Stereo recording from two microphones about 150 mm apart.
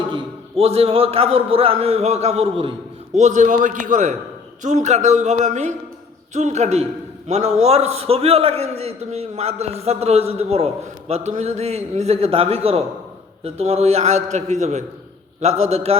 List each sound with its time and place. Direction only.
0.1 s a man's voice: 40° right (ahead or behind)
3.2 s a man's voice: 55° right (ahead or behind)